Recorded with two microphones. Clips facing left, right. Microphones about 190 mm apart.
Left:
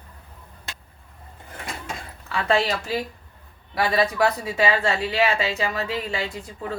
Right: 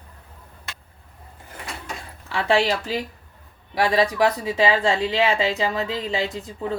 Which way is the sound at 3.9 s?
15° right (ahead or behind).